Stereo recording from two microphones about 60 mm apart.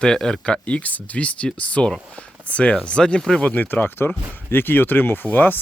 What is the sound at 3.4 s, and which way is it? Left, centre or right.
Speech, left.